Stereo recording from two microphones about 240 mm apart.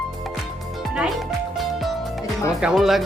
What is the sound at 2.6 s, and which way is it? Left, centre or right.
Speech, centre.